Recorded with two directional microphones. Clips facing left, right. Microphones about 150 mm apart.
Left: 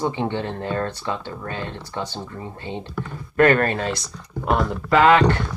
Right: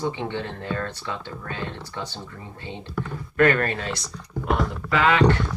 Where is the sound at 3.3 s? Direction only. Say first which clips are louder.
Left 3 dB; 40° left (ahead or behind).